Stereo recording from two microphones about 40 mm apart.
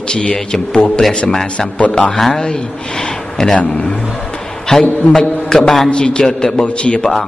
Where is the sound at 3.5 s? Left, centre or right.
Left.